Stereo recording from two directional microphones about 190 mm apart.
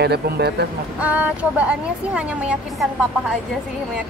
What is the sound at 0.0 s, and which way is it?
Speech, 60° right (ahead or behind).